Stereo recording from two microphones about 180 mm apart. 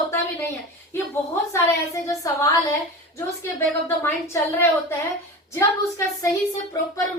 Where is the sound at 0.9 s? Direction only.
15° left (ahead or behind).